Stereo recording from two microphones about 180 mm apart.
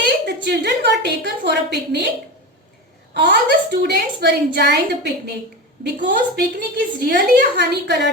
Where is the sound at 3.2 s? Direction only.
65° right (ahead or behind).